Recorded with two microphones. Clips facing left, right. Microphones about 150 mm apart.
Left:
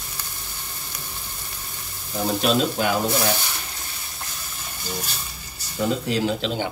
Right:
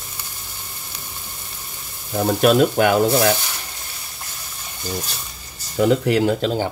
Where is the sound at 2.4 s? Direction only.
55° right (ahead or behind).